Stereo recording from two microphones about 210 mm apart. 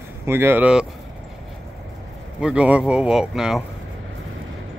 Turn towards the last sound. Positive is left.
turn(degrees=-5)  # may be behind; listen again after turning